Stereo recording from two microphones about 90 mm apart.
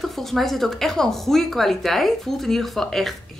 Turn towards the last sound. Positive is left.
turn(degrees=0)  # may be behind; listen again after turning